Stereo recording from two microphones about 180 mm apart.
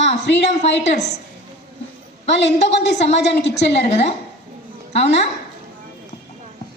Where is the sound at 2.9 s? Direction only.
35° left (ahead or behind).